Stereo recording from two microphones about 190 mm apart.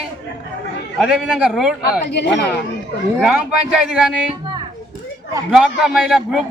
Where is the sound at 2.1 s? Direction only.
65° left (ahead or behind).